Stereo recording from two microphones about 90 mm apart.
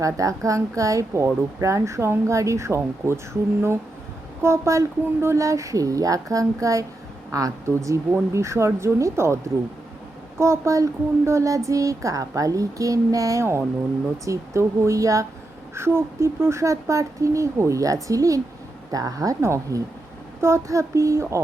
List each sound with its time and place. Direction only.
0.0 s speech: 40° right (ahead or behind)
4.4 s speech: 30° right (ahead or behind)